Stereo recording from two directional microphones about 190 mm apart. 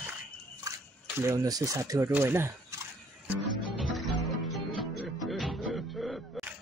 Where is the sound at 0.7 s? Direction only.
15° right (ahead or behind).